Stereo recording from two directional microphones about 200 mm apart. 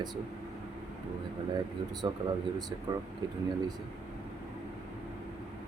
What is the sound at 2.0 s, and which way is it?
Speech, 20° right (ahead or behind).